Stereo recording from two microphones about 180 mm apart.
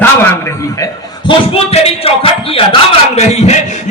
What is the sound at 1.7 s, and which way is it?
Speech, 30° left (ahead or behind).